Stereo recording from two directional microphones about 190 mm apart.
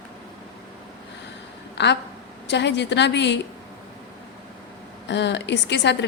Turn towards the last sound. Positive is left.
turn(degrees=65)  # may be behind; listen again after turning